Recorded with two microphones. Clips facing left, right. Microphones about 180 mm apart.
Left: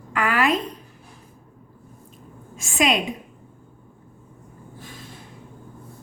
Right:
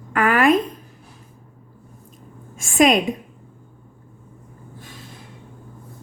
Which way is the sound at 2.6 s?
50° right (ahead or behind).